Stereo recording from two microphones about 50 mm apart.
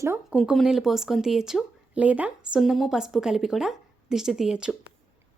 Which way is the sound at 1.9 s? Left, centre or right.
Right.